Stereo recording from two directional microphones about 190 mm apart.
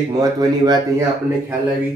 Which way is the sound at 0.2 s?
20° right (ahead or behind).